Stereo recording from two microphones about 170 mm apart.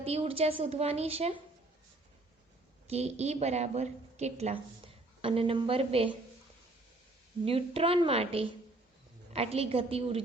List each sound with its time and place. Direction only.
0.0 s a woman's voice: 35° right (ahead or behind)
2.8 s a woman's voice: 40° right (ahead or behind)
7.4 s a woman's voice: 35° right (ahead or behind)